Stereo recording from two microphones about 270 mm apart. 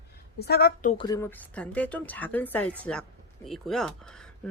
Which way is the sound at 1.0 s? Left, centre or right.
Centre.